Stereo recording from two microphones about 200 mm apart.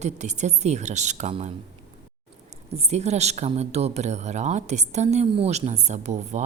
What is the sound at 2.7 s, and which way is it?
A woman's voice, 30° right (ahead or behind).